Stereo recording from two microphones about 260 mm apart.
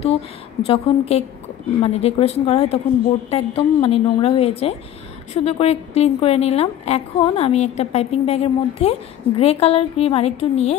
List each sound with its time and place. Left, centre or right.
0.0 s a woman's voice: left